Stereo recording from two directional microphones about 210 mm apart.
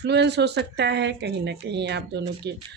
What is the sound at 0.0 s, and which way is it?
Speech, 55° right (ahead or behind).